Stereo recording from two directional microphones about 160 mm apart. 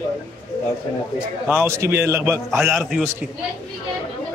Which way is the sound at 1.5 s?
15° right (ahead or behind).